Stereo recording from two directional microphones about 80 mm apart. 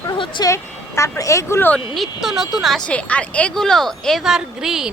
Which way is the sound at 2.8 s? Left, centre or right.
Centre.